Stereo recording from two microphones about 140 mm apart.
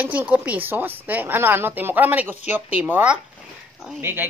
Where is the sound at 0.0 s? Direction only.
10° right (ahead or behind).